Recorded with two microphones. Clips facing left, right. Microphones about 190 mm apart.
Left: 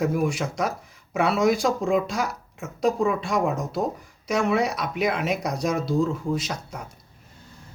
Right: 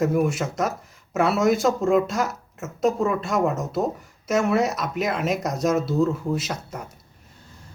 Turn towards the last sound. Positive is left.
turn(degrees=-5)  # may be behind; listen again after turning